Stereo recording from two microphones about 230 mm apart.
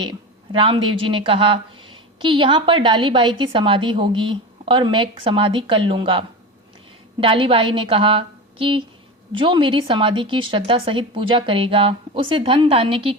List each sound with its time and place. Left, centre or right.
0.0 s a woman's voice: right